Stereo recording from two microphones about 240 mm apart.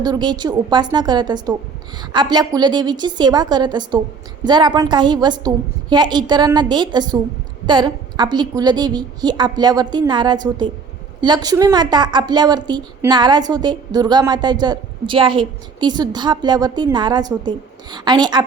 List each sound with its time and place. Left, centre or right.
0.0 s a woman's voice: centre